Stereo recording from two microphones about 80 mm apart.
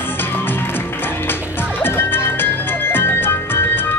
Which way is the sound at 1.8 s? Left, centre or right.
Left.